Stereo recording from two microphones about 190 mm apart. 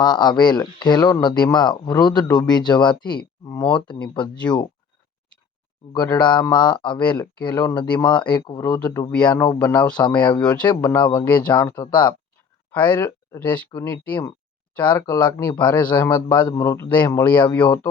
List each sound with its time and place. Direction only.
0.0 s speech: 20° left (ahead or behind)
5.9 s speech: 25° left (ahead or behind)
10.4 s speech: 5° left (ahead or behind)
10.7 s speech: 20° left (ahead or behind)
12.7 s speech: 10° left (ahead or behind)
16.1 s speech: 20° left (ahead or behind)